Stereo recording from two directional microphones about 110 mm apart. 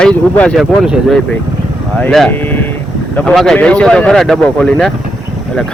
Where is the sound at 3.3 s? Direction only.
Centre (ahead or behind).